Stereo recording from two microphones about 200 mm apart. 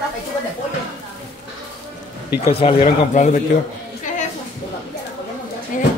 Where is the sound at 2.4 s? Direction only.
30° left (ahead or behind).